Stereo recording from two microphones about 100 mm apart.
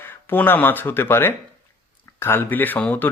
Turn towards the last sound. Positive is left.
turn(degrees=15)  # may be behind; listen again after turning